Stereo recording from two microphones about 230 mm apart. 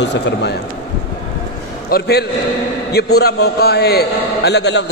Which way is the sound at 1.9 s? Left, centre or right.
Left.